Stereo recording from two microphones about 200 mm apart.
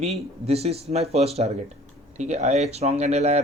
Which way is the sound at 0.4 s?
30° right (ahead or behind).